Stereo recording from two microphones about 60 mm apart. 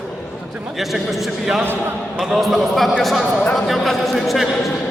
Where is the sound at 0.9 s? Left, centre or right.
Centre.